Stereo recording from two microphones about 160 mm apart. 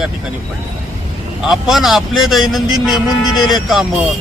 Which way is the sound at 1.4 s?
Centre (ahead or behind).